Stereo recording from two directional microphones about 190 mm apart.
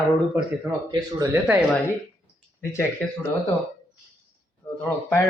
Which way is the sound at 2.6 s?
10° left (ahead or behind).